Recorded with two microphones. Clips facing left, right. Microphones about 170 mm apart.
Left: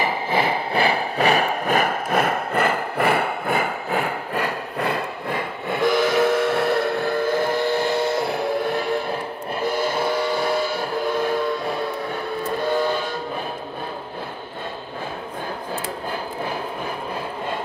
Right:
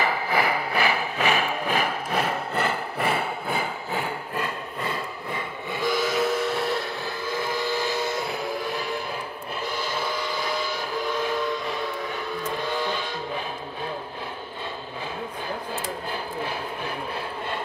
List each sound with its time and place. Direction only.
0.0 s engine: 25° left (ahead or behind); by 9.0 s 55° left (ahead or behind)
9.6 s train: 50° left (ahead or behind)